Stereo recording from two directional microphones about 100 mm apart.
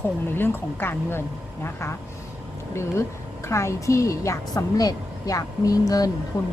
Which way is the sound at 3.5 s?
30° left (ahead or behind).